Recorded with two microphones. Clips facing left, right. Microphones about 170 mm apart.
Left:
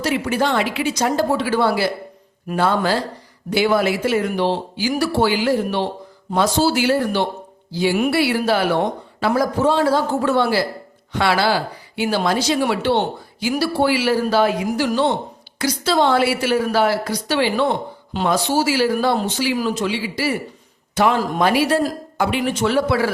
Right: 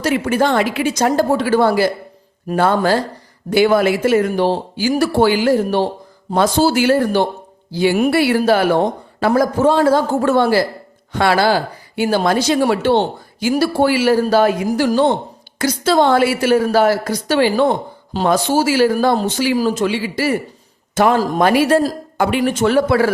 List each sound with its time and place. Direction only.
0.0 s a man's voice: 50° right (ahead or behind)